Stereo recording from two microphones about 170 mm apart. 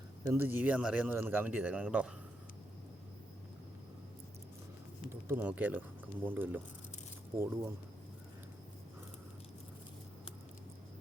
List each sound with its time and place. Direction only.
0.3 s speech: 10° right (ahead or behind)
5.3 s speech: 10° right (ahead or behind)